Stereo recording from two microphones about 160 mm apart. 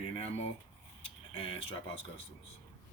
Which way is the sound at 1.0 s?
35° left (ahead or behind).